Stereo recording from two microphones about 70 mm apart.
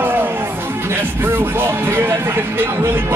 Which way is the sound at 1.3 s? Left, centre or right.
Right.